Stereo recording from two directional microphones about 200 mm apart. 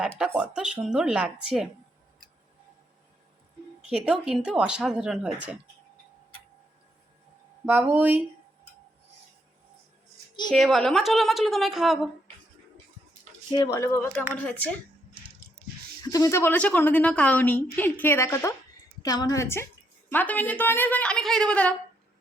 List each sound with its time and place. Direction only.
0.3 s speech: 5° right (ahead or behind)
3.8 s speech: 5° right (ahead or behind)
7.6 s speech: 10° right (ahead or behind)
10.5 s speech: centre (ahead or behind)
13.5 s a woman's voice: 15° left (ahead or behind)
16.0 s a woman's voice: 15° left (ahead or behind)